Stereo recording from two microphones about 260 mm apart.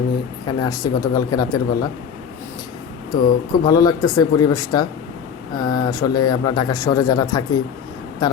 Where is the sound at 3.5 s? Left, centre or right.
Centre.